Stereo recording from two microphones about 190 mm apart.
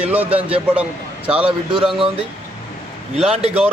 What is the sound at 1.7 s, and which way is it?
Speech, 25° right (ahead or behind).